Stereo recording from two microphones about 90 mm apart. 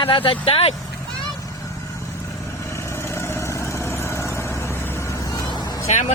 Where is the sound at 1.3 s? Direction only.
40° left (ahead or behind).